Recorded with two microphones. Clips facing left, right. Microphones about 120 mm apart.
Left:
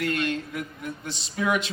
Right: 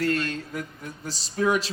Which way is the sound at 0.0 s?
35° right (ahead or behind).